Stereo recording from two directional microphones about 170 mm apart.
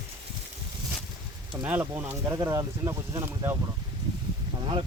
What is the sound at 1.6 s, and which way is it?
Speech, 10° right (ahead or behind).